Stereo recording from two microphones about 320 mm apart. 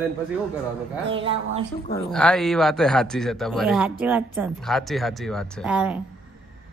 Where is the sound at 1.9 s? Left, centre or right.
Centre.